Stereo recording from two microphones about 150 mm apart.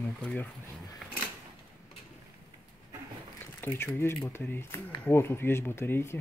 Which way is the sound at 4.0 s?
15° left (ahead or behind).